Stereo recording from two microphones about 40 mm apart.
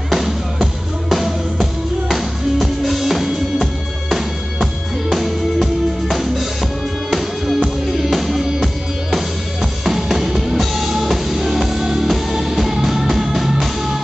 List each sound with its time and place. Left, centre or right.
1.0 s music: centre
5.1 s music: centre
9.1 s drum kit: centre
10.6 s music: centre